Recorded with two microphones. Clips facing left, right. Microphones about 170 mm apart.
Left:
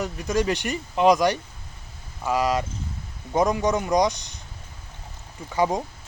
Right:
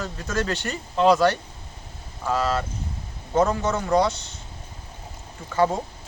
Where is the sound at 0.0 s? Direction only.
15° left (ahead or behind).